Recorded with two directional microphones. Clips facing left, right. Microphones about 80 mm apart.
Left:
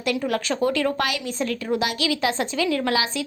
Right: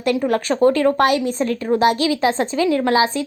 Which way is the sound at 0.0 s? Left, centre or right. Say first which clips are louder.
Right 6 dB; right.